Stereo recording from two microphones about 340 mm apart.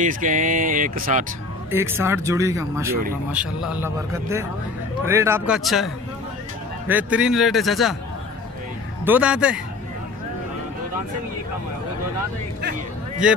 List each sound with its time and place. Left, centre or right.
0.0 s speech: right
1.7 s speech: centre
6.9 s speech: centre
9.0 s speech: centre
13.2 s speech: centre